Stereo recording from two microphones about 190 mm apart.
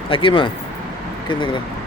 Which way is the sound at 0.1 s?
25° left (ahead or behind).